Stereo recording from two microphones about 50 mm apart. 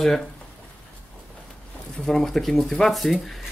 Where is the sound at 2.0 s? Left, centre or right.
Centre.